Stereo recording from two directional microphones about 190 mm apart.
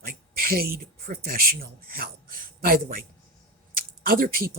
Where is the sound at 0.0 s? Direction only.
50° right (ahead or behind).